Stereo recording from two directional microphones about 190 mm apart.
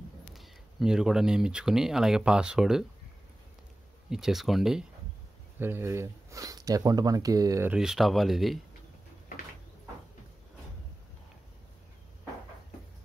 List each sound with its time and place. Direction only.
0.3 s speech: centre (ahead or behind)
4.1 s speech: centre (ahead or behind)
5.6 s speech: 10° right (ahead or behind)
7.7 s speech: centre (ahead or behind)